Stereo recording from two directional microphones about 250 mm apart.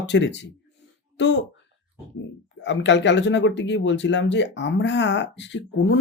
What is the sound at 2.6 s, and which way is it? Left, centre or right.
Speech, left.